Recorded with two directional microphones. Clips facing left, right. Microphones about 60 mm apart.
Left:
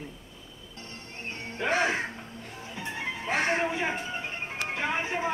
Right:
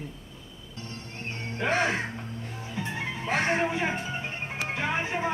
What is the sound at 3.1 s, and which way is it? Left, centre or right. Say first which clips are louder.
Speech: right 1 dB; centre.